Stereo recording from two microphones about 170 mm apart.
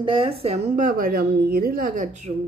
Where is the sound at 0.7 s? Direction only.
50° right (ahead or behind).